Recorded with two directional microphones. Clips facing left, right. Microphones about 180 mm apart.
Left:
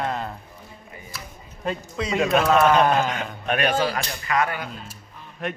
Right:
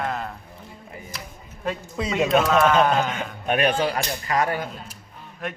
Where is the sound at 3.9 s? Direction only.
35° right (ahead or behind).